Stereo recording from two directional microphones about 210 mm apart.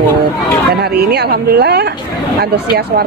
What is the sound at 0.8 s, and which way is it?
A woman's voice, 50° right (ahead or behind).